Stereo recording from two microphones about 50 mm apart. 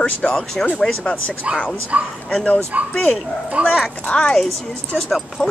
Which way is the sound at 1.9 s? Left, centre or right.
Right.